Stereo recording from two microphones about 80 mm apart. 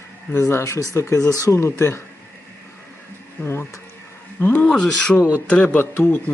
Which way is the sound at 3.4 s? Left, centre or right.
Left.